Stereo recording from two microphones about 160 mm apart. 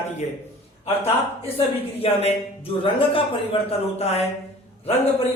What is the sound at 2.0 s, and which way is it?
A man's voice, 35° left (ahead or behind).